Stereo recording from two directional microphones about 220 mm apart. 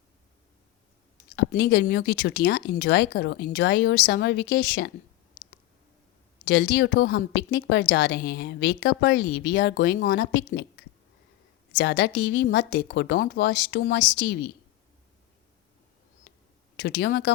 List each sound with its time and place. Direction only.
1.4 s a woman's voice: 50° left (ahead or behind)
6.4 s a woman's voice: 55° left (ahead or behind)
16.8 s a woman's voice: 50° left (ahead or behind)